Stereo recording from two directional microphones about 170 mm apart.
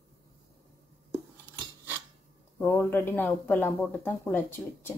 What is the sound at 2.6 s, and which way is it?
Speech, 15° left (ahead or behind).